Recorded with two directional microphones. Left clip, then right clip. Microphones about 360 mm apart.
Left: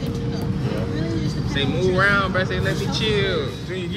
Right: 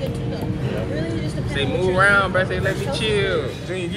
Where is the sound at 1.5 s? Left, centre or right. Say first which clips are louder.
Right 1 dB; centre.